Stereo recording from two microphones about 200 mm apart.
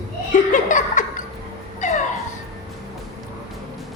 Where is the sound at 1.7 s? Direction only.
35° left (ahead or behind).